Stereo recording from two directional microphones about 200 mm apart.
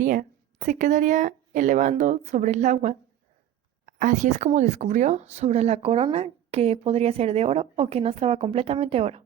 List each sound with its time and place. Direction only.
0.0 s speech: 40° right (ahead or behind)